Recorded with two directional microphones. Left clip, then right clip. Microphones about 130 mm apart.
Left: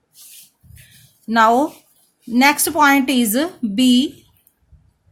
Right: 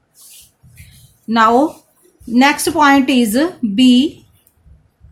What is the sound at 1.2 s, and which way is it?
A woman's voice, 50° left (ahead or behind).